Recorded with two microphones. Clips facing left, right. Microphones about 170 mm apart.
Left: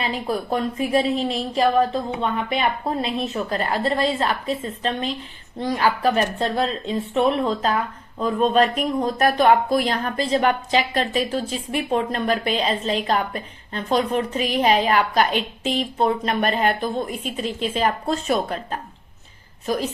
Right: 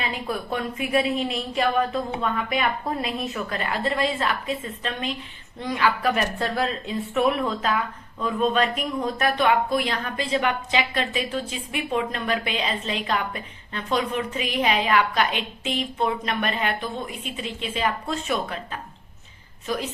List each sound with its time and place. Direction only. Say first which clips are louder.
0.0 s a woman's voice: left 4 dB; 35° left (ahead or behind)